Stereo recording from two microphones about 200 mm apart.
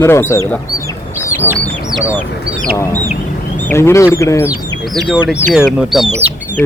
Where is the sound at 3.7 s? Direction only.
15° left (ahead or behind).